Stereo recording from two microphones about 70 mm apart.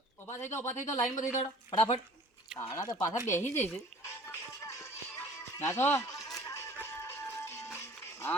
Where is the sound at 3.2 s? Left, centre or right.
Left.